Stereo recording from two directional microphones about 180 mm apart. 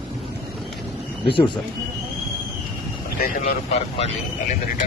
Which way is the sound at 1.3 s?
25° left (ahead or behind).